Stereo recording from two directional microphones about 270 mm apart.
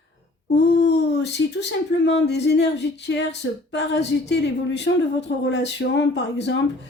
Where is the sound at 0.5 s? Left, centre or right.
Left.